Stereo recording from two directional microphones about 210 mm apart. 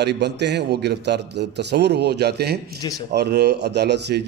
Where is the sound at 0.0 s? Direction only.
55° right (ahead or behind).